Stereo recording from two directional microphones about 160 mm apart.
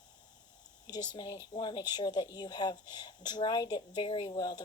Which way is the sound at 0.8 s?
25° left (ahead or behind).